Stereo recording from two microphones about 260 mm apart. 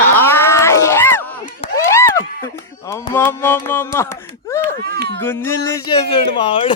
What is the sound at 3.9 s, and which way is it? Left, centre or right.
Speech, centre.